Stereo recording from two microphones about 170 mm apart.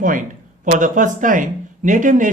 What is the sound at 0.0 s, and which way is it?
Speech, 50° right (ahead or behind).